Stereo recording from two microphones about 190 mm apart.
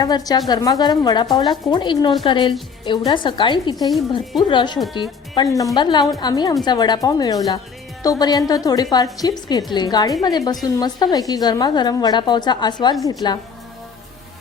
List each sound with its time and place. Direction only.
0.0 s a woman's voice: 20° left (ahead or behind)